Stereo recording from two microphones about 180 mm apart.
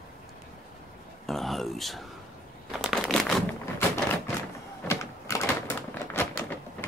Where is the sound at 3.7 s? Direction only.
15° left (ahead or behind).